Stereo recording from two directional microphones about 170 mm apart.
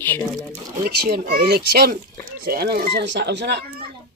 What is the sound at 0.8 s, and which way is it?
Speech, 60° right (ahead or behind).